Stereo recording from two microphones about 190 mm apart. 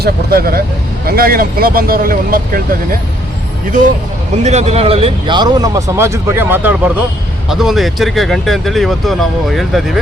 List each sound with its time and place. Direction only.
0.0 s speech: 55° right (ahead or behind)
4.4 s speech: 35° right (ahead or behind); by 10.0 s centre (ahead or behind)